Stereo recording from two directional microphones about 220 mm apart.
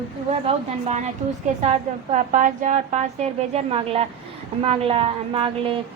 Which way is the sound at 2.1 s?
35° right (ahead or behind).